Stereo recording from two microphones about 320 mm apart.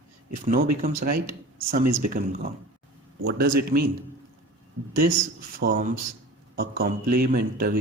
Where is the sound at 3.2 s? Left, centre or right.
Right.